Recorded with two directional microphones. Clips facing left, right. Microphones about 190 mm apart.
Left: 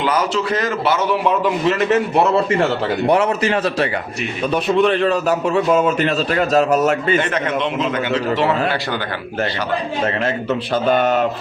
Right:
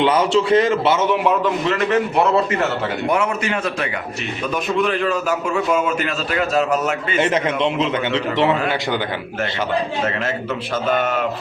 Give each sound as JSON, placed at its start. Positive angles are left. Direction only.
{"t": 0.0, "sound": "a man's voice", "side_deg": -25}
{"t": 1.6, "sound": "a man's voice", "side_deg": 25}
{"t": 7.2, "sound": "a man's voice", "side_deg": -25}
{"t": 10.8, "sound": "a man's voice", "side_deg": 35}